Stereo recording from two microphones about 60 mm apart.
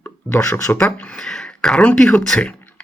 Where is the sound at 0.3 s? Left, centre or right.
Left.